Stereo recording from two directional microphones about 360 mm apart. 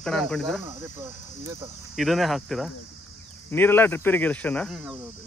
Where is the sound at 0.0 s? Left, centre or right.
Centre.